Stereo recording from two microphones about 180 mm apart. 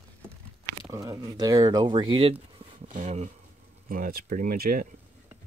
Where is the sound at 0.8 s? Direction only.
20° right (ahead or behind).